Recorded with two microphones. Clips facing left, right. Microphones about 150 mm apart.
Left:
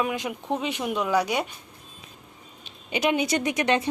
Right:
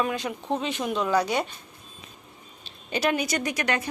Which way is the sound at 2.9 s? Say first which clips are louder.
Left 2 dB; 20° left (ahead or behind).